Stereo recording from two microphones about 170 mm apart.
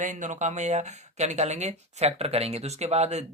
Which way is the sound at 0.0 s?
45° right (ahead or behind).